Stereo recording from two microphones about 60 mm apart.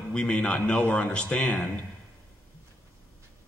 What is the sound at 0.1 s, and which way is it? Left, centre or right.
A man's voice, centre.